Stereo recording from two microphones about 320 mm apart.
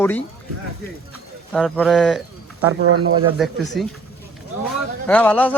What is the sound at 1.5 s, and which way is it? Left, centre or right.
Speech, centre.